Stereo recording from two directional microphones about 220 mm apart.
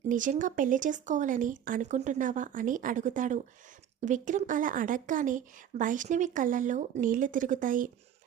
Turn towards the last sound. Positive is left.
turn(degrees=-35)  # may be behind; listen again after turning